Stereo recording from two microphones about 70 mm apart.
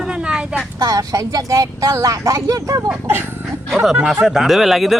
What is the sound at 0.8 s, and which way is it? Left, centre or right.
Speech, right.